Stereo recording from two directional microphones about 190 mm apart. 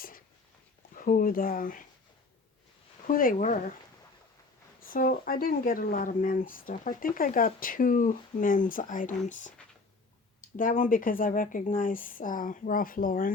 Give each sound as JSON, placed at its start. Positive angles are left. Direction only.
{"t": 0.9, "sound": "speech", "side_deg": 45}
{"t": 3.1, "sound": "speech", "side_deg": 50}
{"t": 4.9, "sound": "speech", "side_deg": 45}
{"t": 10.6, "sound": "speech", "side_deg": 45}